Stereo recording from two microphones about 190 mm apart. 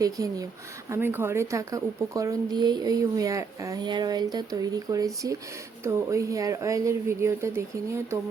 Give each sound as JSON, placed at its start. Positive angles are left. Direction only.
{"t": 0.0, "sound": "a woman's voice", "side_deg": -20}